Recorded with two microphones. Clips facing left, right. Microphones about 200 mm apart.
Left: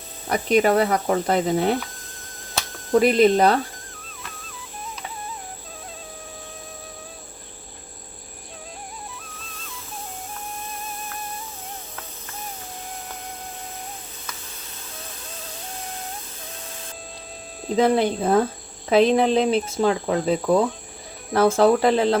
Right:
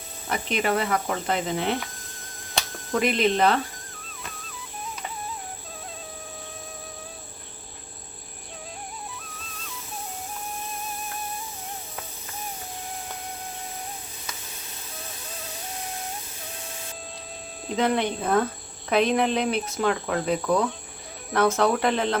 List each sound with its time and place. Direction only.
0.3 s speech: 40° left (ahead or behind)
3.0 s speech: 40° left (ahead or behind)
3.9 s music: centre (ahead or behind)
17.7 s speech: 35° left (ahead or behind)